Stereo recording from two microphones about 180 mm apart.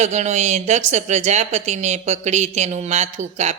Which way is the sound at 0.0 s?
40° right (ahead or behind).